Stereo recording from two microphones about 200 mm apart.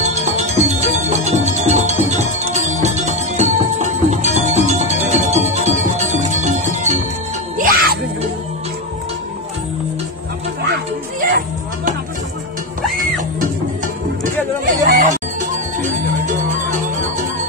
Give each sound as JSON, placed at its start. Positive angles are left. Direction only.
{"t": 0.1, "sound": "music", "side_deg": -35}
{"t": 11.1, "sound": "music", "side_deg": -40}
{"t": 14.6, "sound": "music", "side_deg": -40}